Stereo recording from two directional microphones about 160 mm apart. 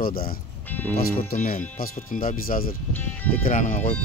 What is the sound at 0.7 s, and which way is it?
Speech, 10° left (ahead or behind).